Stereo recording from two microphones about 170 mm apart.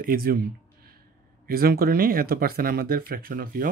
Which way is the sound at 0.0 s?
60° right (ahead or behind).